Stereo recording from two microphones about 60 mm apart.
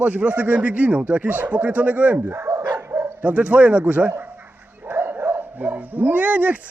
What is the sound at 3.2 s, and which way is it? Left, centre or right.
Speech, right.